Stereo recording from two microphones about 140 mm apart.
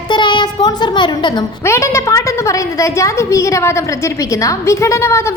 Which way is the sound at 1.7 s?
20° left (ahead or behind).